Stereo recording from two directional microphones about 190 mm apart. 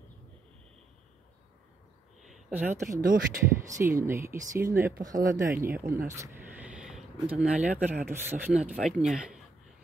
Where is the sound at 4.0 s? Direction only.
15° right (ahead or behind).